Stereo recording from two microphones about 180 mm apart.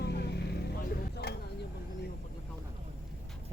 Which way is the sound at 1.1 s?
65° left (ahead or behind).